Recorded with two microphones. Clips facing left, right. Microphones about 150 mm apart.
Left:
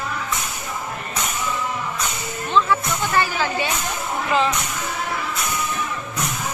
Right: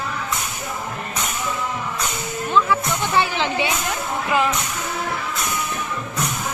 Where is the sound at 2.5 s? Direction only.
10° right (ahead or behind).